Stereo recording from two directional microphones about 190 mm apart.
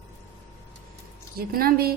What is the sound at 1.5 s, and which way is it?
Speech, 50° right (ahead or behind).